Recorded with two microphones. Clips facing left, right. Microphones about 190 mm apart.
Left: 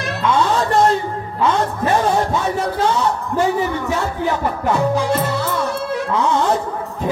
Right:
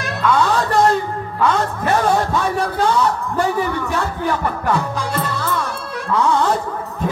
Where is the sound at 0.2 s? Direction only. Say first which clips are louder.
Even; 25° left (ahead or behind).